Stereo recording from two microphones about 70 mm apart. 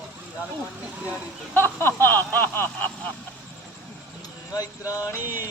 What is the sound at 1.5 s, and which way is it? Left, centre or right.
Snicker, left.